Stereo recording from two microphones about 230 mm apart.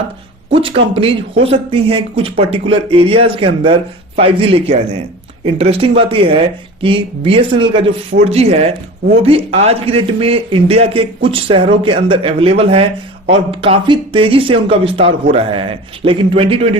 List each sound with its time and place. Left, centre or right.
0.5 s a man's voice: right